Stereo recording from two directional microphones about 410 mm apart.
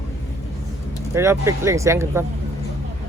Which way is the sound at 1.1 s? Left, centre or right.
Centre.